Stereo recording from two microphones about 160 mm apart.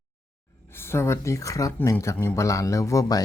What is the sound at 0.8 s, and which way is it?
Speech, 15° left (ahead or behind).